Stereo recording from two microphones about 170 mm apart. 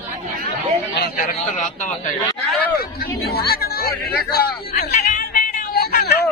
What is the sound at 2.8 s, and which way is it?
Speech, 65° left (ahead or behind).